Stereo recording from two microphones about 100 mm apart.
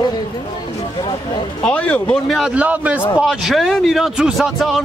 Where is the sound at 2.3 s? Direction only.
Centre (ahead or behind).